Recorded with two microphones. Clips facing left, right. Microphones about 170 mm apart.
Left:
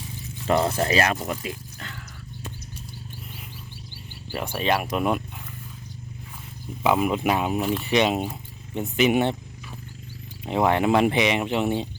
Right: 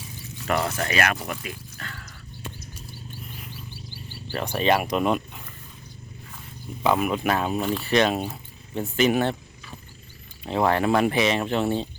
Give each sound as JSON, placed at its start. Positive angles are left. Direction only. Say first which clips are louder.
{"t": 0.4, "sound": "speech", "louder": "left 4 dB", "side_deg": 25}
{"t": 4.5, "sound": "speech", "louder": "right 2 dB", "side_deg": 0}
{"t": 6.8, "sound": "speech", "louder": "left 1 dB", "side_deg": 15}
{"t": 10.4, "sound": "speech", "louder": "left 1 dB", "side_deg": 20}